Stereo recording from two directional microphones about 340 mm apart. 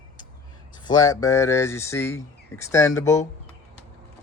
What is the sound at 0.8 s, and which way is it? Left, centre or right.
Speech, centre.